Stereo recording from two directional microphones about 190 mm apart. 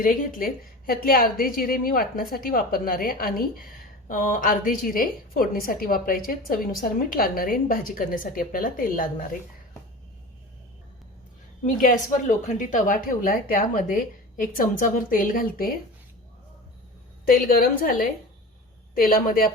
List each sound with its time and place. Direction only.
0.0 s a woman's voice: 45° left (ahead or behind)
11.6 s a woman's voice: 45° left (ahead or behind)
17.2 s a woman's voice: 50° left (ahead or behind)
18.9 s a woman's voice: 50° left (ahead or behind)